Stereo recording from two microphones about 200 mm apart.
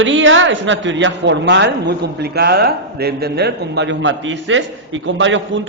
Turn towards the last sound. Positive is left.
turn(degrees=-70)  # may be behind; listen again after turning